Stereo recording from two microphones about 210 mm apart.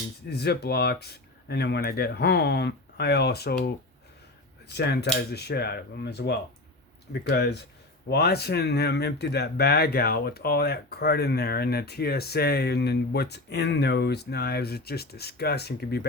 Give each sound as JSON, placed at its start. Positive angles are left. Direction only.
{"t": 0.3, "sound": "speech", "side_deg": 50}
{"t": 4.7, "sound": "speech", "side_deg": 50}